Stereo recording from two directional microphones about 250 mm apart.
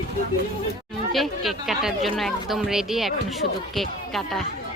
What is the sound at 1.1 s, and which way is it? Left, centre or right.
Speech, centre.